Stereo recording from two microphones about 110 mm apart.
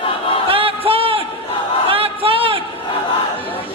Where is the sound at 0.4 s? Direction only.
55° right (ahead or behind).